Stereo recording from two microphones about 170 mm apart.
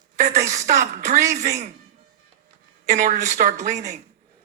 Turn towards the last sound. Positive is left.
turn(degrees=-45)  # may be behind; listen again after turning